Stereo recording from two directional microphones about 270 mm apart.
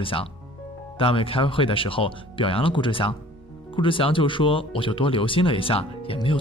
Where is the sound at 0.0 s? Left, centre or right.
Centre.